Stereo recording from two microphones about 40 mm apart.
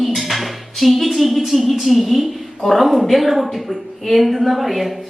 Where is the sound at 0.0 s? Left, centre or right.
Centre.